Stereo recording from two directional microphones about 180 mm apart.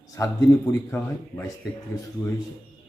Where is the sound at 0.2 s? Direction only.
20° left (ahead or behind).